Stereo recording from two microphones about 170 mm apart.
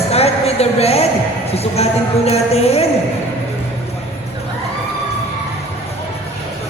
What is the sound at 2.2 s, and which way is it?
Speech, 35° left (ahead or behind).